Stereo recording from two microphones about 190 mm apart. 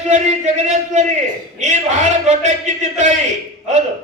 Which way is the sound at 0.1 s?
35° right (ahead or behind).